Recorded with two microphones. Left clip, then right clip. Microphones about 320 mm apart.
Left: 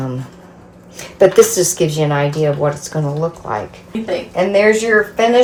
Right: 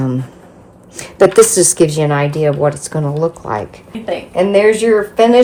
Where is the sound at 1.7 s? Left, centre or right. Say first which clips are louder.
Right 3 dB; right.